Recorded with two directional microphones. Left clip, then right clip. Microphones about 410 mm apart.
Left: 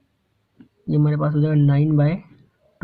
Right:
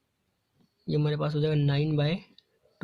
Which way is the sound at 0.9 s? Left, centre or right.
Right.